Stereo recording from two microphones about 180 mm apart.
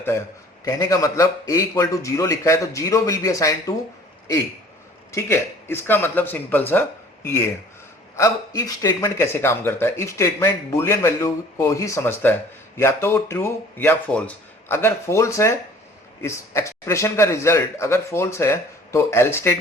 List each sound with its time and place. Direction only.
0.6 s speech: 20° left (ahead or behind)
5.1 s speech: 15° left (ahead or behind)
8.1 s speech: 20° left (ahead or behind)